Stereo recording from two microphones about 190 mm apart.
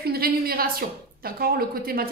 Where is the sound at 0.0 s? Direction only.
55° right (ahead or behind).